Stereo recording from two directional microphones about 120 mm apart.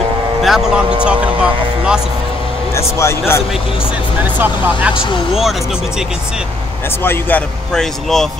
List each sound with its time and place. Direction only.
0.4 s speech: 5° right (ahead or behind)
3.0 s a man's voice: 20° left (ahead or behind)
4.2 s speech: 15° right (ahead or behind)
5.3 s speech: centre (ahead or behind)
7.0 s speech: 15° left (ahead or behind)